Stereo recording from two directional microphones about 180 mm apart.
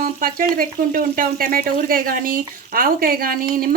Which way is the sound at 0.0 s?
50° right (ahead or behind).